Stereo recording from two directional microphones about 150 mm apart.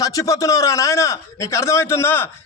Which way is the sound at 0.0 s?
25° left (ahead or behind).